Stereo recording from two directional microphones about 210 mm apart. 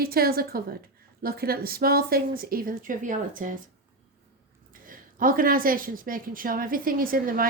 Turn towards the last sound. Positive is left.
turn(degrees=-45)  # may be behind; listen again after turning